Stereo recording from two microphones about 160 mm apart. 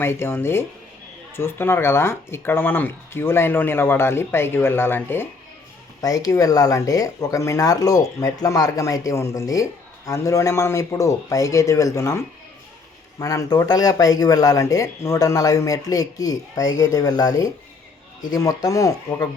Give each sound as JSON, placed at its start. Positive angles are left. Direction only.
{"t": 0.0, "sound": "speech", "side_deg": 15}